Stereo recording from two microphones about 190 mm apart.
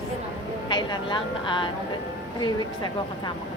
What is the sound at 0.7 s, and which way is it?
Speech, 25° left (ahead or behind).